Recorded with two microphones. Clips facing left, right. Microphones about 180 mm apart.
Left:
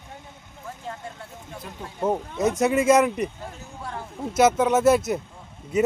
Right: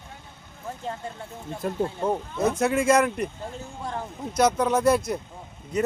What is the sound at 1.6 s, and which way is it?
Speech, 45° right (ahead or behind).